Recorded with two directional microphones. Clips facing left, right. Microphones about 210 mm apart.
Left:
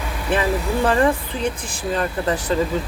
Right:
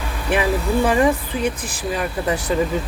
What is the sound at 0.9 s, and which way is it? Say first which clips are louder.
Speech: left 1 dB; 10° right (ahead or behind).